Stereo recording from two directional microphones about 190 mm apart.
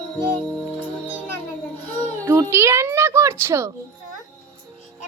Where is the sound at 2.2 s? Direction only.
15° right (ahead or behind).